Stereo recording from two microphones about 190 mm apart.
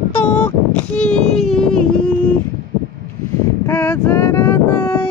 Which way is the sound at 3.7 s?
10° left (ahead or behind).